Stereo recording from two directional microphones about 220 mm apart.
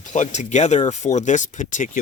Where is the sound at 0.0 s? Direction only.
35° left (ahead or behind).